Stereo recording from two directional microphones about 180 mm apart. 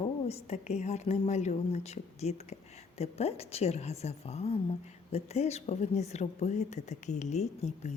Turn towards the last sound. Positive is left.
turn(degrees=40)  # may be behind; listen again after turning